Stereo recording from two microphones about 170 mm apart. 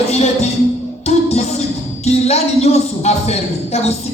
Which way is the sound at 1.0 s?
40° left (ahead or behind).